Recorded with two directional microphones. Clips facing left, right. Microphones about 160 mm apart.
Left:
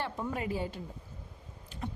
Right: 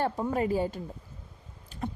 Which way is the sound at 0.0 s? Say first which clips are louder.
Right 7 dB; 40° right (ahead or behind).